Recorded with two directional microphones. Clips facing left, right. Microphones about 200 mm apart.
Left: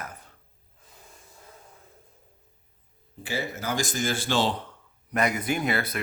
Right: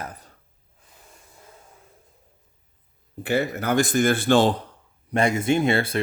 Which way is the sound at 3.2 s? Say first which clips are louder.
Right 8 dB; 60° right (ahead or behind).